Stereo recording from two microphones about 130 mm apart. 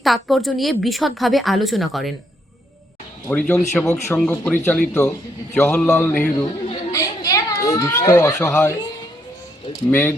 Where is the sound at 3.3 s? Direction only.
10° left (ahead or behind).